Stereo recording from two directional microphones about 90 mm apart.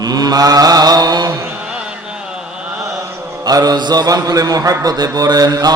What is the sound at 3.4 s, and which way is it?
Mantra, 45° right (ahead or behind).